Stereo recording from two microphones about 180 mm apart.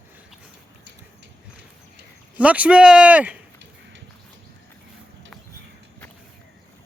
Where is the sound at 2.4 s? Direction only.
10° right (ahead or behind).